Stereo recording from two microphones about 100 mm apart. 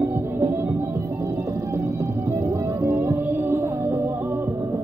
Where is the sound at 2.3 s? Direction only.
25° right (ahead or behind).